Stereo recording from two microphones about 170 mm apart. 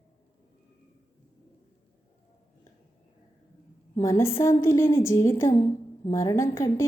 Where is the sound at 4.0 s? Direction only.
15° left (ahead or behind).